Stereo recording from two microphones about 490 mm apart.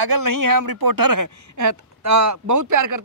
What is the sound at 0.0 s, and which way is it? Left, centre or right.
Speech, right.